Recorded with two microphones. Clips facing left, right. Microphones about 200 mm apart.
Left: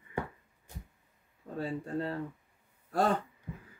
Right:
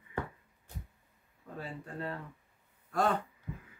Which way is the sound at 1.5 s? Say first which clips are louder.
Left 8 dB; 30° left (ahead or behind).